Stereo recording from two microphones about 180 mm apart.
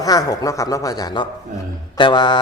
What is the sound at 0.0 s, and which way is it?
A man's voice, 20° left (ahead or behind).